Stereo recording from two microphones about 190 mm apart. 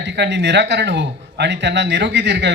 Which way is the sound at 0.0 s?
65° right (ahead or behind).